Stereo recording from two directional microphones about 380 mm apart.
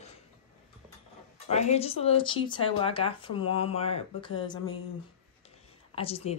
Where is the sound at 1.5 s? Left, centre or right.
Centre.